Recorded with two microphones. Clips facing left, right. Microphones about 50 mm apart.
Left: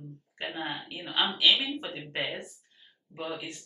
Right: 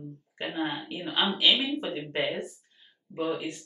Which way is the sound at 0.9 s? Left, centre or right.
Right.